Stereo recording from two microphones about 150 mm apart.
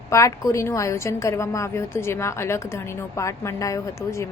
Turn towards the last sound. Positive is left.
turn(degrees=20)  # may be behind; listen again after turning